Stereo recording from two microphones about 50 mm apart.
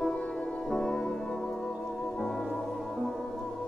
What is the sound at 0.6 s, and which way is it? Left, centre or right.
Music, centre.